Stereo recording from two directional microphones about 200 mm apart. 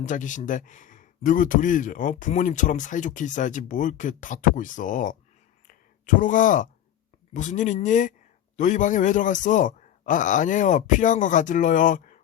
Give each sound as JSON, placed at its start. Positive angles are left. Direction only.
{"t": 0.0, "sound": "speech", "side_deg": 40}
{"t": 5.6, "sound": "a sound", "side_deg": 40}
{"t": 7.3, "sound": "speech", "side_deg": 40}